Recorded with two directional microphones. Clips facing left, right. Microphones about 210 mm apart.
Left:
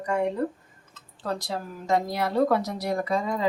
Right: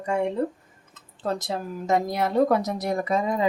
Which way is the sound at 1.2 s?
20° right (ahead or behind).